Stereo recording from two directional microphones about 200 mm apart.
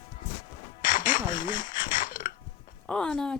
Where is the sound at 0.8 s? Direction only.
40° left (ahead or behind).